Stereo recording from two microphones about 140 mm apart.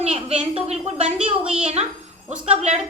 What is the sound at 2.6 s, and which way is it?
Speech, 50° right (ahead or behind).